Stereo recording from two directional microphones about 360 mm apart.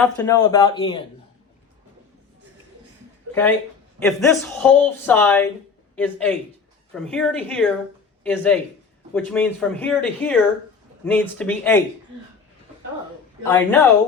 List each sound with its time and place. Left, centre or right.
0.0 s a man's voice: centre
4.0 s speech: centre
13.5 s speech: centre